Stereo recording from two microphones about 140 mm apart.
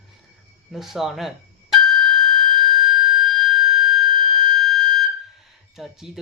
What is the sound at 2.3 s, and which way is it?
Siren, centre (ahead or behind).